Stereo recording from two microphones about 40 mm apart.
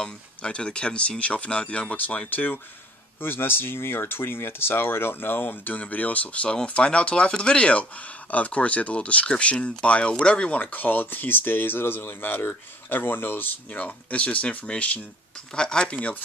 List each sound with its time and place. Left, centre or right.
0.4 s speech: left
2.0 s speech: left
3.2 s speech: left
5.8 s speech: left
13.7 s speech: left
15.5 s speech: left
15.9 s speech: left